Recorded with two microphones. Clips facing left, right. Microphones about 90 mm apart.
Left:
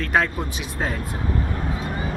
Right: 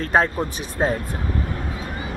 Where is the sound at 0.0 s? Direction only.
35° right (ahead or behind).